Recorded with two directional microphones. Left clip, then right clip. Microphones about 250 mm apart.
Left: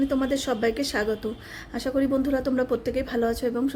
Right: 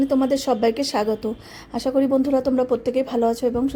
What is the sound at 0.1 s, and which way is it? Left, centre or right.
Speech, centre.